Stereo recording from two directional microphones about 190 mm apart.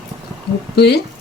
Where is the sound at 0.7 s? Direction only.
60° left (ahead or behind).